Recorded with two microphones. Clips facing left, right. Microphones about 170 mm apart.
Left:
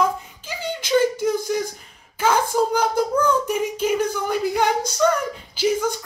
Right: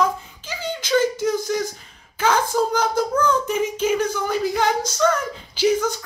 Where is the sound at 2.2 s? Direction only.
10° left (ahead or behind).